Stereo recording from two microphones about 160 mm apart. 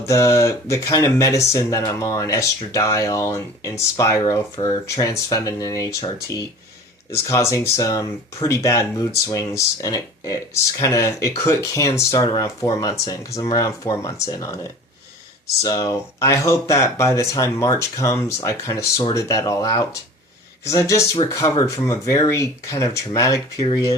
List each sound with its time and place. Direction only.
0.0 s speech: 20° left (ahead or behind)